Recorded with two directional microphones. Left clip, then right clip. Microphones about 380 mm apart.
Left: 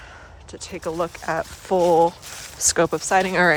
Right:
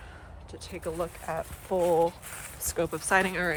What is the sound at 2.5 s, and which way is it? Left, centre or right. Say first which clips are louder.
Speech: left 11 dB; left.